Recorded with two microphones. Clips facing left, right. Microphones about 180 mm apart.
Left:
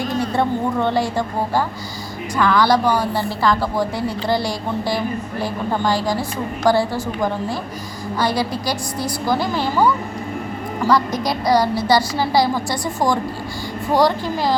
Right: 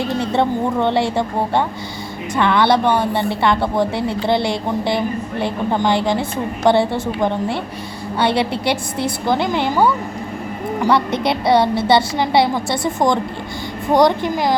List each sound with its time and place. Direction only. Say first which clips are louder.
0.2 s a woman's voice: right 1 dB; 20° right (ahead or behind)
10.8 s a woman's voice: right 1 dB; 25° right (ahead or behind)